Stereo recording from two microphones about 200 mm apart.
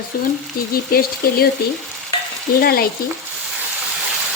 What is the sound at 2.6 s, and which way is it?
Speech, 50° left (ahead or behind).